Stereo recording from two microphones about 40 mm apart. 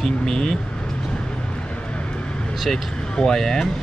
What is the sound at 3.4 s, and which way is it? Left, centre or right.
Speech, centre.